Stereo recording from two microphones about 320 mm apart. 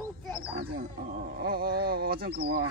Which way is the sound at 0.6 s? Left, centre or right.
Right.